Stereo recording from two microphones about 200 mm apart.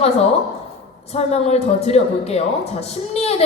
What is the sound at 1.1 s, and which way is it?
A woman's voice, 30° left (ahead or behind).